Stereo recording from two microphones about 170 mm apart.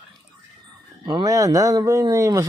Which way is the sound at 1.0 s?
25° right (ahead or behind).